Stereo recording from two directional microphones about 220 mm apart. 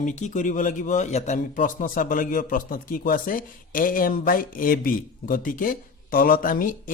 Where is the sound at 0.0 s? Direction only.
35° left (ahead or behind).